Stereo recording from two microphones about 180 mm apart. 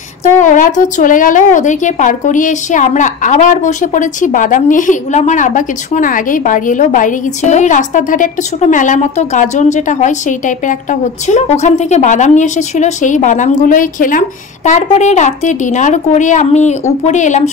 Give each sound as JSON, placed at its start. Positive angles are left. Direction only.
{"t": 0.4, "sound": "a woman's voice", "side_deg": 45}